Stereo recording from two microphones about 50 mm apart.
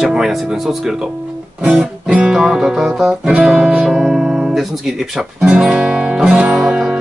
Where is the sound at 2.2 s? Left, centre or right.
Centre.